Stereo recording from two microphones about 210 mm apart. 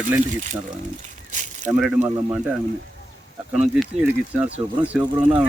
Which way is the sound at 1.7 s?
5° right (ahead or behind).